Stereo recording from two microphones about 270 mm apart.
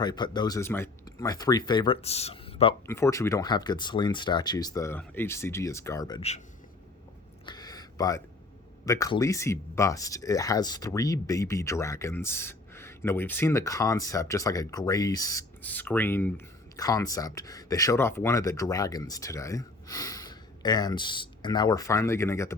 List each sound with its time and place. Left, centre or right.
0.0 s speech: centre
2.8 s speech: centre
7.4 s a sound: centre
8.9 s speech: centre